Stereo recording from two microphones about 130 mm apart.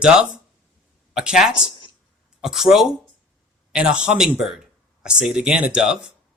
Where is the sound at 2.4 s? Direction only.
5° right (ahead or behind).